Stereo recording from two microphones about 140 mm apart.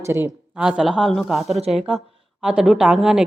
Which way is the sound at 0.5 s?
5° right (ahead or behind).